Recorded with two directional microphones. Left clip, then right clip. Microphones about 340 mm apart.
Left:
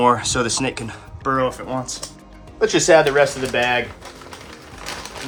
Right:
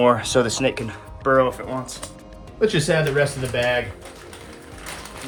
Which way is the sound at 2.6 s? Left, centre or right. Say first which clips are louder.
Left 6 dB; centre.